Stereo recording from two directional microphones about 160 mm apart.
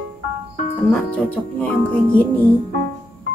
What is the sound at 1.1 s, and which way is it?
Speech, 10° left (ahead or behind).